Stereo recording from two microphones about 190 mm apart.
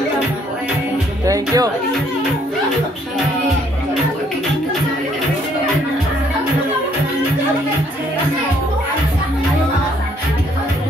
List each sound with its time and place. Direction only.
1.2 s music: 20° right (ahead or behind)